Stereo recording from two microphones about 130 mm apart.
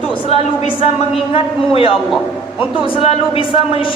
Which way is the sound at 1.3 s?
45° left (ahead or behind).